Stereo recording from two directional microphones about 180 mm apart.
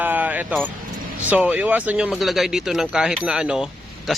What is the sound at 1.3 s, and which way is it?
Speech, 10° right (ahead or behind).